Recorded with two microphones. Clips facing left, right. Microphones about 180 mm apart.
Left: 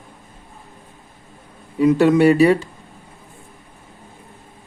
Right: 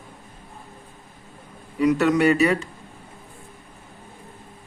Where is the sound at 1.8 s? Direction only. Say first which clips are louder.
Left 5 dB; 25° left (ahead or behind).